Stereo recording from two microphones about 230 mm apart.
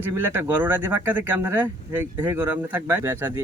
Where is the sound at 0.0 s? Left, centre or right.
Centre.